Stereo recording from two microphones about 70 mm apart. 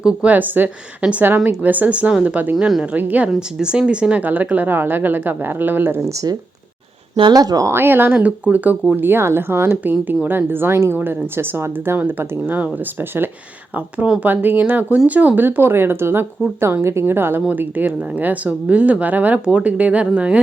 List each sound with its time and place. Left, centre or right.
0.0 s speech: centre; by 6.1 s right
6.1 s speech: right
7.3 s speech: right
7.7 s speech: right
9.0 s speech: right